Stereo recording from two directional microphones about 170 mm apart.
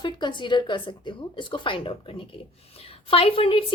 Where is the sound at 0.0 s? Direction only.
25° left (ahead or behind).